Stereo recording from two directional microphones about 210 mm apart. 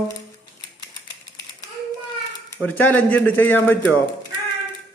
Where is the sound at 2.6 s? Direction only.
10° left (ahead or behind).